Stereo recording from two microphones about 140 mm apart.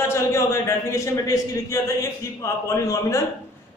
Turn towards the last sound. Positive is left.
turn(degrees=20)  # may be behind; listen again after turning